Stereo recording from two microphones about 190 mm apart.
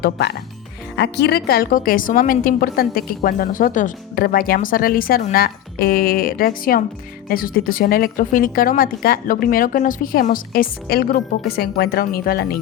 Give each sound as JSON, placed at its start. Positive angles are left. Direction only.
{"t": 0.0, "sound": "a woman's voice", "side_deg": 60}